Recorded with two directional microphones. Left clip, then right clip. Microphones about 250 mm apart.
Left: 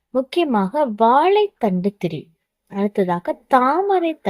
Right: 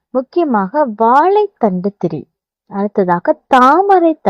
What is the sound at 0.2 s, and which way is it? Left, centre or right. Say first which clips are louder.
A woman's voice: right 5 dB; right.